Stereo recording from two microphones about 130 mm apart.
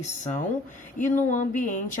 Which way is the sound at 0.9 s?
85° left.